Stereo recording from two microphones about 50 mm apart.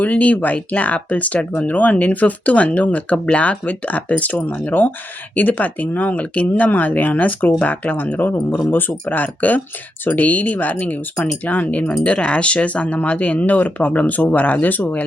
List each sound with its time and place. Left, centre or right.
0.0 s speech: left